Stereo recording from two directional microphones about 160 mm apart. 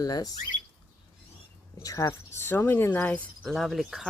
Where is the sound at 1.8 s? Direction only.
20° left (ahead or behind); by 4.0 s centre (ahead or behind).